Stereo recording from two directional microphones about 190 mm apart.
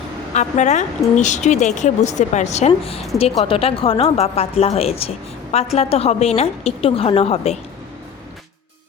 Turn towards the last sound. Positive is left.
turn(degrees=35)  # may be behind; listen again after turning